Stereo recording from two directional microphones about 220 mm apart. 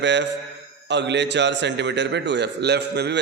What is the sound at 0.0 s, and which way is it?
A man's voice, 50° right (ahead or behind).